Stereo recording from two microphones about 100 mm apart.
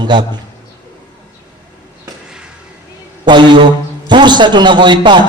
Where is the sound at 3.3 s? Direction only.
50° right (ahead or behind).